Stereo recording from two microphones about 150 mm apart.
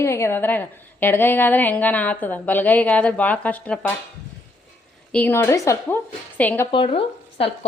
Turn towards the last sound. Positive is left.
turn(degrees=40)  # may be behind; listen again after turning